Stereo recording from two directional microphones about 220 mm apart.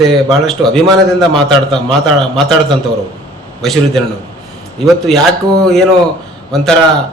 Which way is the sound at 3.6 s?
Centre (ahead or behind).